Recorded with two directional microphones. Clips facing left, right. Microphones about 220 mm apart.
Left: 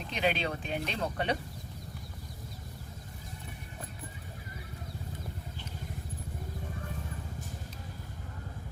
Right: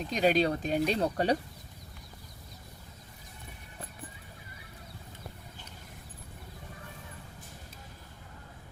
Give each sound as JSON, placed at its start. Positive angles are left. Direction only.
{"t": 0.1, "sound": "speech", "side_deg": -40}